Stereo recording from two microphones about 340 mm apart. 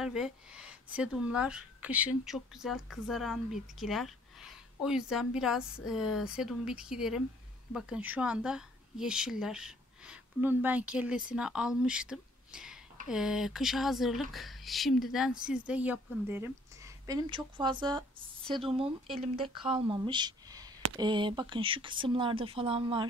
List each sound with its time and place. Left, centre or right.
0.0 s a woman's voice: centre